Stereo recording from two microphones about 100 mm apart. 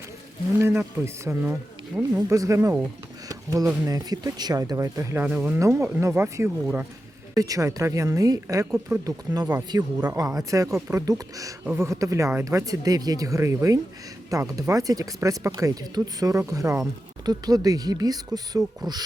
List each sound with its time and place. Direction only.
0.6 s speech: 25° right (ahead or behind)
2.0 s speech: 10° right (ahead or behind)
2.3 s a woman's voice: 30° right (ahead or behind)
3.2 s a sound: 35° right (ahead or behind)
3.8 s a woman's voice: 40° right (ahead or behind)
5.2 s speech: 15° right (ahead or behind)
5.5 s a woman's voice: 30° right (ahead or behind)
11.0 s a woman's voice: 35° right (ahead or behind)